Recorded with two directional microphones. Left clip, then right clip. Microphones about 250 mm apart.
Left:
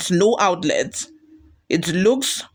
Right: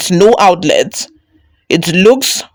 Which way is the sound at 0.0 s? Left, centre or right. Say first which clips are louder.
Right 10 dB; right.